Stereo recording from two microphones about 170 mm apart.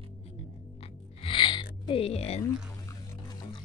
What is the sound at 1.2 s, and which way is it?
Music, 30° left (ahead or behind).